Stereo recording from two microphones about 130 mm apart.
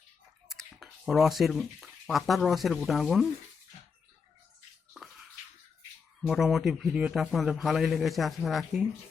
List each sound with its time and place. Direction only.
0.4 s speech: centre (ahead or behind)
4.9 s bathtub: centre (ahead or behind)
6.2 s a man's voice: 5° right (ahead or behind)